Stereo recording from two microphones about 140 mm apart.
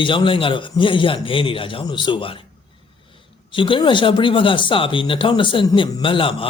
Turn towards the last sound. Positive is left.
turn(degrees=40)  # may be behind; listen again after turning